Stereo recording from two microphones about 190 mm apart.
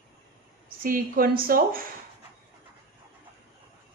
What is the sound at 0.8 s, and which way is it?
Speech, 50° right (ahead or behind).